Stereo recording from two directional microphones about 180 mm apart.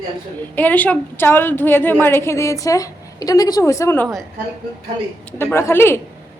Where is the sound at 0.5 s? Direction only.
10° left (ahead or behind).